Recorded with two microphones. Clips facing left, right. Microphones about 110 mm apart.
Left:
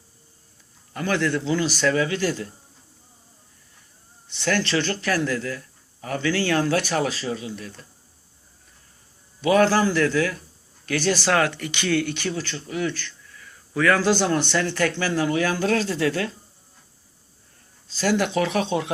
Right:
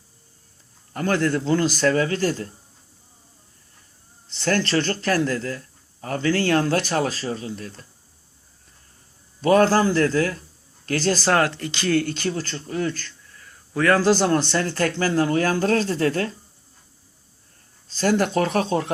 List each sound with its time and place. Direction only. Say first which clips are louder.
0.9 s a man's voice: right 2 dB; 40° right (ahead or behind)
4.4 s a man's voice: right 2 dB; 40° right (ahead or behind)
9.4 s a man's voice: right 1 dB; 40° right (ahead or behind)
17.8 s speech: right 2 dB; 45° right (ahead or behind)